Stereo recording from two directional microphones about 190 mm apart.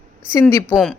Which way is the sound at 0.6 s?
Centre (ahead or behind).